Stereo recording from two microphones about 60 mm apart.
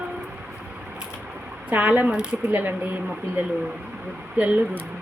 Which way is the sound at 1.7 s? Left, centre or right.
Right.